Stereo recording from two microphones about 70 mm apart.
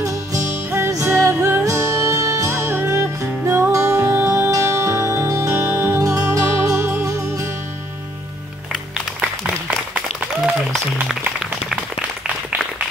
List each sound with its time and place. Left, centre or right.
0.0 s music: right
4.3 s music: right
5.9 s music: right
9.2 s applause: right
10.7 s music: centre